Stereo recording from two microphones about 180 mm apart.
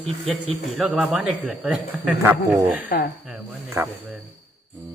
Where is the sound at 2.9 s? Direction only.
55° left (ahead or behind).